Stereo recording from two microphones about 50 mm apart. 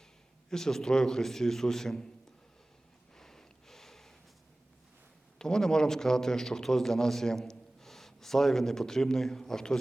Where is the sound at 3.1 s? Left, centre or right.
Centre.